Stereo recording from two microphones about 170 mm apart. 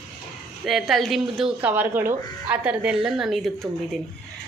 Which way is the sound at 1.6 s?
10° right (ahead or behind).